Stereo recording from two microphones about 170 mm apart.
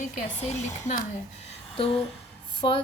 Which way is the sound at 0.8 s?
45° left (ahead or behind).